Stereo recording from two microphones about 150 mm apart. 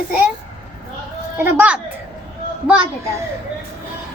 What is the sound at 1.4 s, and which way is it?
Speech, 15° right (ahead or behind).